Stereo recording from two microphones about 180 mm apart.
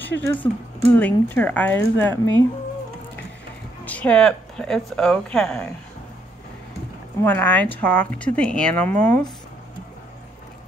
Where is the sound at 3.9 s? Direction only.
10° left (ahead or behind).